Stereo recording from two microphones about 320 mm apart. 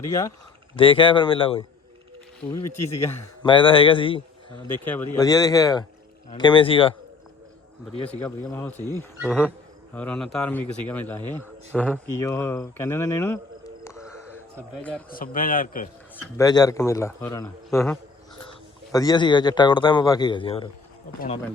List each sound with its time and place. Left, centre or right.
0.0 s a man's voice: centre
2.8 s a man's voice: centre
8.0 s a man's voice: centre
15.1 s a man's voice: left
16.4 s a man's voice: centre